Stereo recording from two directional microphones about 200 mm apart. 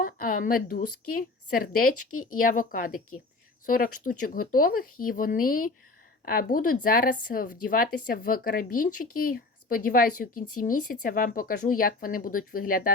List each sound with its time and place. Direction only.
0.0 s a sound: 45° left (ahead or behind)
1.1 s a woman's voice: 45° left (ahead or behind)
2.0 s speech: 90° left
2.4 s a woman's voice: 45° left (ahead or behind)